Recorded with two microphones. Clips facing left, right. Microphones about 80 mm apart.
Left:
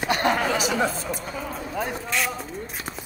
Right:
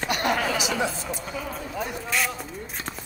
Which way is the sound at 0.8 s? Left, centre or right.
Left.